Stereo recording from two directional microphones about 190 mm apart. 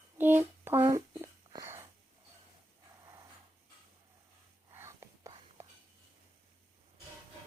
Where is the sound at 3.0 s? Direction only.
20° right (ahead or behind).